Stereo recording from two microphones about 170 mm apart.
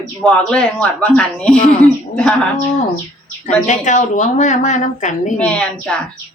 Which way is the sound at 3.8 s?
45° left (ahead or behind).